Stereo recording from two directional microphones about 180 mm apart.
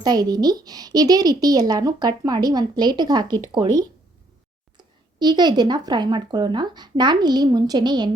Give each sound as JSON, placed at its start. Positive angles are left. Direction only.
{"t": 0.0, "sound": "speech", "side_deg": -20}